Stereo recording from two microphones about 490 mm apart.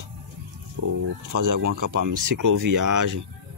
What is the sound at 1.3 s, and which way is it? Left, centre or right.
Speech, right.